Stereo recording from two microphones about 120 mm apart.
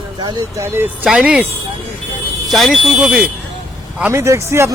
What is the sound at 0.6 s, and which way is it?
Speech, 20° right (ahead or behind).